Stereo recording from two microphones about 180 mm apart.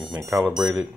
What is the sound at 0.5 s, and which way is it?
Speech, 5° right (ahead or behind).